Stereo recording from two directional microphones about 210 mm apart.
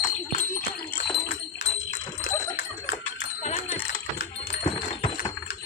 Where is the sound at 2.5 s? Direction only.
50° left (ahead or behind).